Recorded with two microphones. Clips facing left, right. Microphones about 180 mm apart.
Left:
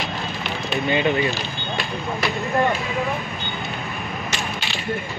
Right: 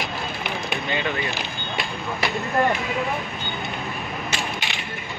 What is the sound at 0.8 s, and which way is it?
Speech, 15° left (ahead or behind).